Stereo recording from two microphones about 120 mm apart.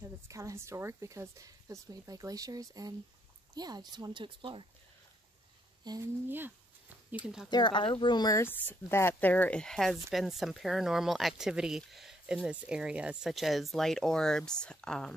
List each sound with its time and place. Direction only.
0.0 s speech: 25° right (ahead or behind); by 4.6 s 45° right (ahead or behind)
5.9 s speech: 15° right (ahead or behind)
7.4 s speech: 40° left (ahead or behind)
8.4 s speech: 20° left (ahead or behind)